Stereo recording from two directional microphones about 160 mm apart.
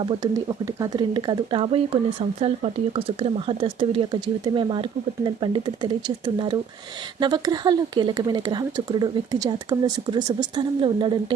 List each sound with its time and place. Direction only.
0.0 s speech: 30° right (ahead or behind)